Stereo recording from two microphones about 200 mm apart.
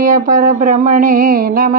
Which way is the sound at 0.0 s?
45° right (ahead or behind).